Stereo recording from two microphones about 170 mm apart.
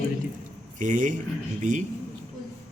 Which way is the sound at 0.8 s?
45° right (ahead or behind).